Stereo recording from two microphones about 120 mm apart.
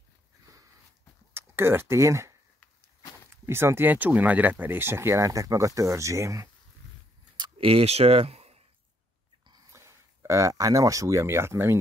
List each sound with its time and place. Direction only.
1.3 s speech: 20° right (ahead or behind)
3.4 s speech: 20° right (ahead or behind)
7.5 s speech: 55° right (ahead or behind)
9.7 s speech: 25° right (ahead or behind)